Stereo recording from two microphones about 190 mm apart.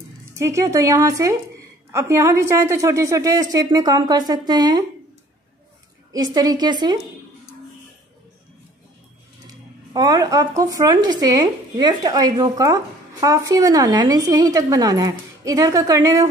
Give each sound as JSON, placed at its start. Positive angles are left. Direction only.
{"t": 0.4, "sound": "a woman's voice", "side_deg": -15}
{"t": 6.1, "sound": "speech", "side_deg": -20}
{"t": 9.5, "sound": "speech", "side_deg": -20}